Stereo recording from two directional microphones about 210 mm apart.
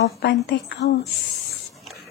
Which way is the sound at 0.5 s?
50° left (ahead or behind).